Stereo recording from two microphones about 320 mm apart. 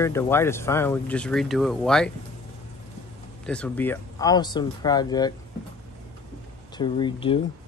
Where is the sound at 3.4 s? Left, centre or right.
Centre.